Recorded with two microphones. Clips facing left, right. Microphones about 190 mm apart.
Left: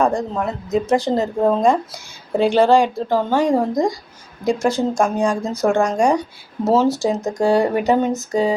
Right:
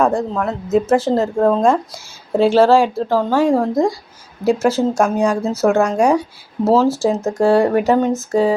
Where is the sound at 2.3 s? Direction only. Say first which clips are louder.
Right 2 dB; centre (ahead or behind).